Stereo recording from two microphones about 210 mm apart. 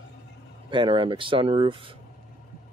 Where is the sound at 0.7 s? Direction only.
25° right (ahead or behind).